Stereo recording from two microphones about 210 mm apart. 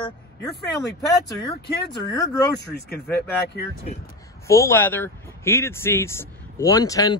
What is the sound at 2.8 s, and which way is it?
Speech, 50° left (ahead or behind).